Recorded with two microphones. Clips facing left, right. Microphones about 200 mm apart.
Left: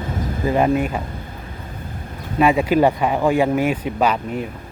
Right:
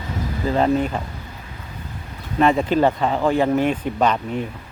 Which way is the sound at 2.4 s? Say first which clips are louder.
Left 1 dB; 10° left (ahead or behind).